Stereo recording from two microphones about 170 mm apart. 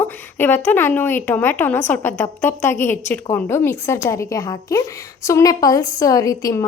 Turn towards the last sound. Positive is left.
turn(degrees=20)  # may be behind; listen again after turning